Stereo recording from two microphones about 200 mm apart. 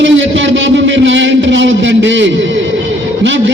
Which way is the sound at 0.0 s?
65° right (ahead or behind).